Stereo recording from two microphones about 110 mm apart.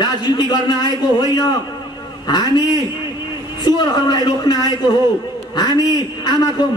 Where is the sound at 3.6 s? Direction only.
40° left (ahead or behind).